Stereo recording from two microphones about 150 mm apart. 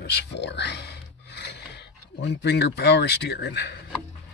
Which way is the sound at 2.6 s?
90° left.